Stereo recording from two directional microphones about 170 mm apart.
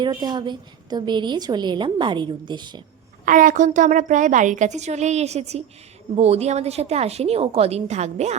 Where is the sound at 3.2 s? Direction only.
50° right (ahead or behind).